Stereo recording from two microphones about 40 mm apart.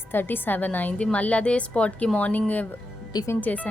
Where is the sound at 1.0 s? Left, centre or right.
Left.